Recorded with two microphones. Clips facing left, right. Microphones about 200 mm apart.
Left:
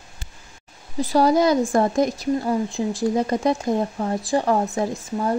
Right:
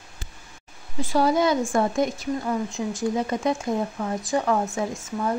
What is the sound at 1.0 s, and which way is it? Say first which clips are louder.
Speech: left 3 dB; 40° left (ahead or behind).